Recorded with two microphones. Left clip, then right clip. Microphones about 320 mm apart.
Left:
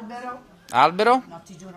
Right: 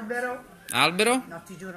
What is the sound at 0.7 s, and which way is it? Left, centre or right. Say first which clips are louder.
Speech: left 5 dB; left.